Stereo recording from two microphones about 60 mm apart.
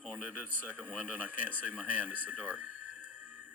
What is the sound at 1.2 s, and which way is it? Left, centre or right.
Speech, right.